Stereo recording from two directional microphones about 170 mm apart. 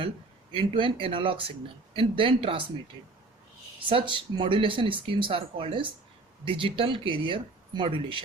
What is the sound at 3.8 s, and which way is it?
Speech, 30° right (ahead or behind).